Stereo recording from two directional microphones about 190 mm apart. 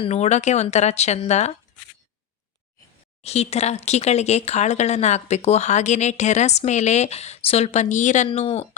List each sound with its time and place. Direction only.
0.0 s speech: 35° left (ahead or behind)
3.2 s speech: 35° left (ahead or behind)